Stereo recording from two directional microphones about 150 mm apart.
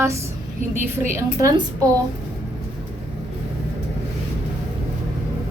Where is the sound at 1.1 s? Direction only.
20° right (ahead or behind).